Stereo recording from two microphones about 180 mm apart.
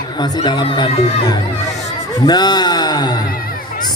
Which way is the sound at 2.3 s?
25° left (ahead or behind).